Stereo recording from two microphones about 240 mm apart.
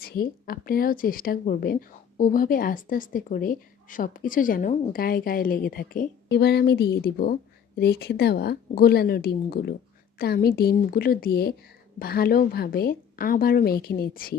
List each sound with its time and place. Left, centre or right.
0.0 s speech: left